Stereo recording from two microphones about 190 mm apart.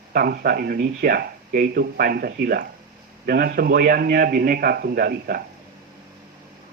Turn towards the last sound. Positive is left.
turn(degrees=-55)  # may be behind; listen again after turning